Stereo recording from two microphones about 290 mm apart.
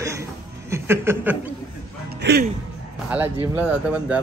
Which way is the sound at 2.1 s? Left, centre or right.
Right.